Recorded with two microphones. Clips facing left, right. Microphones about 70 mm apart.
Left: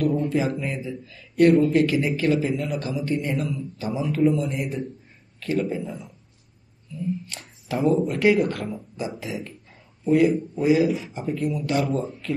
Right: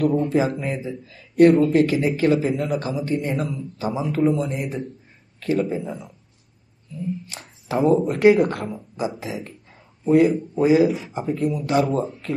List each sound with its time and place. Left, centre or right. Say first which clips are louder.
0.0 s a man's voice: right 3 dB; right
4.2 s speech: right 1 dB; right
7.3 s speech: right 4 dB; right